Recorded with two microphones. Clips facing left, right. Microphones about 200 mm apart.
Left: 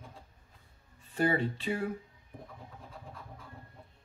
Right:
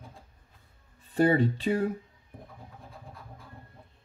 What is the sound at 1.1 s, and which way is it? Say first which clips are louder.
Speech: right 6 dB; 35° right (ahead or behind).